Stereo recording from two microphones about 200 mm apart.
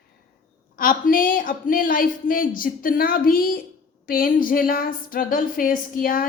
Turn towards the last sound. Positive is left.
turn(degrees=45)  # may be behind; listen again after turning